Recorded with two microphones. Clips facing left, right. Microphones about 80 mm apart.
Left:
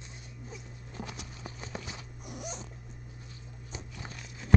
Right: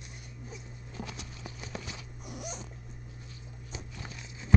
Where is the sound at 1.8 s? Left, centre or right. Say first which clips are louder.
Even; left.